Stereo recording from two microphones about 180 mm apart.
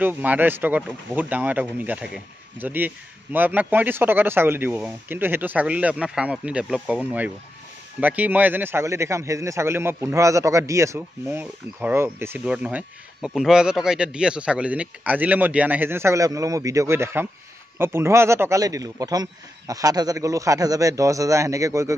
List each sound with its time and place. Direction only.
0.0 s a man's voice: 10° right (ahead or behind)